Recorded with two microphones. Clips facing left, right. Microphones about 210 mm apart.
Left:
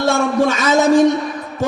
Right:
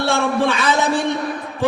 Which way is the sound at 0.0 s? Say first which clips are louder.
Left 3 dB; 45° left (ahead or behind).